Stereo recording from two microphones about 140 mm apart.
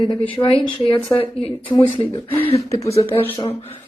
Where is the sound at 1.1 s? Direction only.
40° left (ahead or behind).